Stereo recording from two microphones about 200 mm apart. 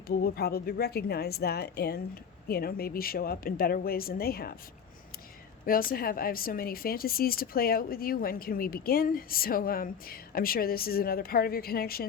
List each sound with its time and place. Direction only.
0.1 s speech: 50° left (ahead or behind)
5.6 s speech: 45° left (ahead or behind)